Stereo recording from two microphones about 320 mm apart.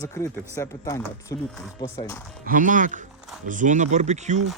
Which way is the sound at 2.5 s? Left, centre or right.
Right.